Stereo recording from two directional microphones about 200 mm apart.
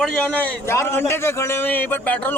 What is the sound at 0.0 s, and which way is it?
A man's voice, 5° left (ahead or behind).